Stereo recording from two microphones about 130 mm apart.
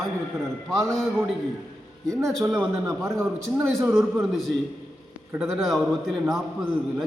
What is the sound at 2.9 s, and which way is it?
Speech, 25° right (ahead or behind).